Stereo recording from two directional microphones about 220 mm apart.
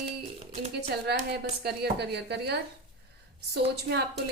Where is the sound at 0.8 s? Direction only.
50° right (ahead or behind).